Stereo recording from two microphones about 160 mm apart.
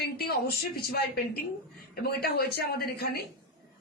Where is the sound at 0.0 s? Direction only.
75° left (ahead or behind).